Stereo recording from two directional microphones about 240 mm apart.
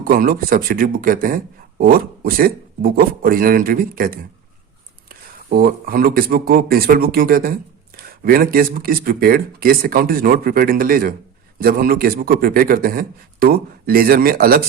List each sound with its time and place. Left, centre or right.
0.0 s speech: right